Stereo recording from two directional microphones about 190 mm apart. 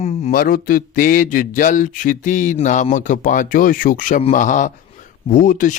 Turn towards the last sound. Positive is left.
turn(degrees=45)  # may be behind; listen again after turning